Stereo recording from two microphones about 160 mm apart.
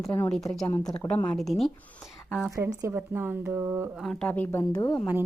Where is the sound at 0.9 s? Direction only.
5° left (ahead or behind).